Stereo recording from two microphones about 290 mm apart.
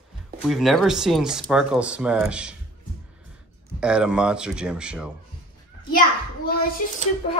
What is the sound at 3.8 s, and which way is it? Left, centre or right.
Speech, centre.